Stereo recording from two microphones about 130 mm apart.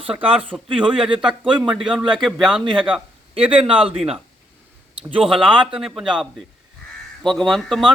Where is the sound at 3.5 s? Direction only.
45° right (ahead or behind).